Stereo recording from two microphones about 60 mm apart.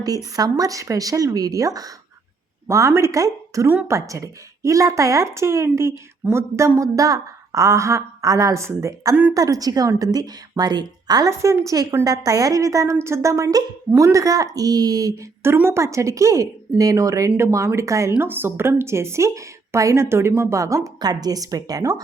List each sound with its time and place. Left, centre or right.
0.0 s speech: right
2.6 s a woman's voice: right
9.3 s speech: right
11.1 s a woman's voice: right
15.6 s a woman's voice: right
18.2 s a woman's voice: right